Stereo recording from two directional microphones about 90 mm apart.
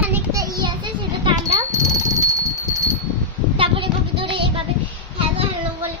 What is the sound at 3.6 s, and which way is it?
Child singing, 80° right.